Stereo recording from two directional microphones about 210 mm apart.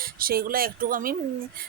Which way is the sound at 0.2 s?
45° right (ahead or behind).